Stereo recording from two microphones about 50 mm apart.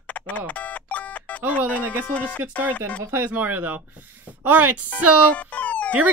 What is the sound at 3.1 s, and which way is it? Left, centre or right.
Speech, right.